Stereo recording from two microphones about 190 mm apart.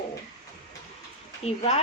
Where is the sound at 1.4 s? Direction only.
35° left (ahead or behind).